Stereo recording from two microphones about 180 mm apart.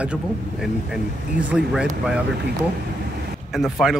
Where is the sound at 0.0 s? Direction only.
5° right (ahead or behind).